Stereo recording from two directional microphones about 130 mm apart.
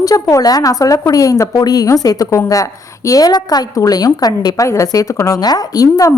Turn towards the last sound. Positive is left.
turn(degrees=25)  # may be behind; listen again after turning